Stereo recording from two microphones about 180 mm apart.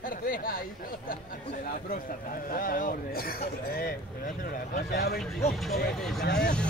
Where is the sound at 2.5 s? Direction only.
50° left (ahead or behind).